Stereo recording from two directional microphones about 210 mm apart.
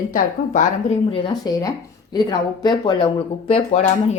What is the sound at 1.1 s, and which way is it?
Speech, 20° left (ahead or behind).